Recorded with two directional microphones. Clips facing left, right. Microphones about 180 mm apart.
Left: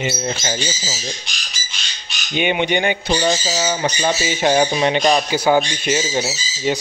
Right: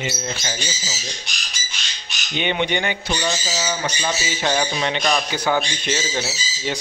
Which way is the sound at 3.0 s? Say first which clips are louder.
Left 6 dB; 30° left (ahead or behind).